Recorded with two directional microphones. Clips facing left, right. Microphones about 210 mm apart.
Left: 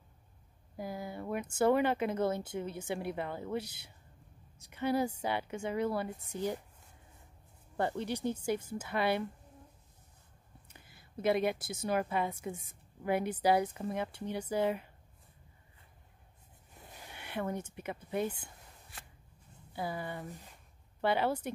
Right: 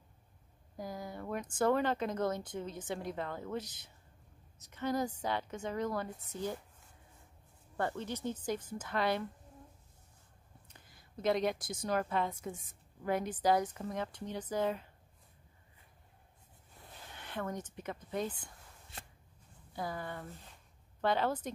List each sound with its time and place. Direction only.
0.7 s a woman's voice: 5° left (ahead or behind)
7.7 s a woman's voice: 20° left (ahead or behind)
10.7 s a woman's voice: 5° left (ahead or behind)
16.7 s speech: 15° left (ahead or behind)
18.9 s shuffling cards: 25° right (ahead or behind)
19.7 s a woman's voice: 5° left (ahead or behind)